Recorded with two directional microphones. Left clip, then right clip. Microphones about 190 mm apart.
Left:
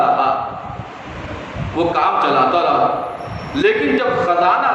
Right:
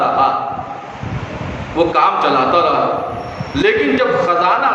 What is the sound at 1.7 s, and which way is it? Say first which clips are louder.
A man's voice: right 3 dB; 35° right (ahead or behind).